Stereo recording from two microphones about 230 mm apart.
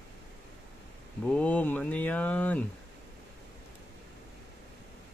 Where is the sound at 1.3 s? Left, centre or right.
Centre.